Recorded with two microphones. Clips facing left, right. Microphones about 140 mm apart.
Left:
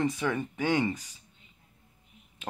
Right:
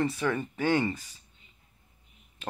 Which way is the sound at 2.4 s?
15° left (ahead or behind).